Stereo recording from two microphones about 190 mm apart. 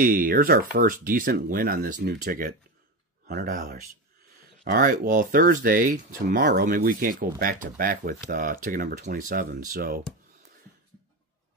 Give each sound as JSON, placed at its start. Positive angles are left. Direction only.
{"t": 0.0, "sound": "speech", "side_deg": -50}